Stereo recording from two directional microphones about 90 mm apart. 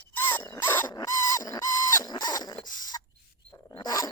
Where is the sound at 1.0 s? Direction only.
45° left (ahead or behind).